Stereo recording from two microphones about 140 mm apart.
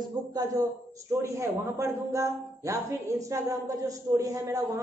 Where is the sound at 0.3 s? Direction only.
25° right (ahead or behind).